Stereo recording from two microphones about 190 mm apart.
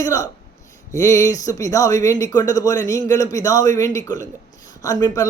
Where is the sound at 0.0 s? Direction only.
20° left (ahead or behind).